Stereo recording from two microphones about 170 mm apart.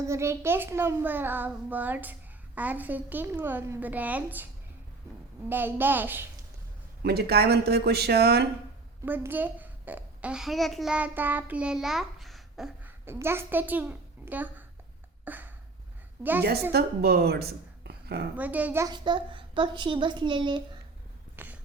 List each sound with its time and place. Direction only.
0.0 s a child's voice: 15° right (ahead or behind)
5.5 s a child's voice: 10° right (ahead or behind)
7.0 s speech: 70° right (ahead or behind)
9.0 s a child's voice: 10° right (ahead or behind)
13.1 s a child's voice: 15° right (ahead or behind)
15.2 s a sound: 10° right (ahead or behind)
16.7 s speech: 70° right (ahead or behind)
18.3 s a child's voice: 10° right (ahead or behind); by 20.6 s 25° right (ahead or behind)
21.3 s a sound: 10° right (ahead or behind)